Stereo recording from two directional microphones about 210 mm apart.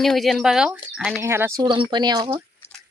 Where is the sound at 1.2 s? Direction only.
10° right (ahead or behind).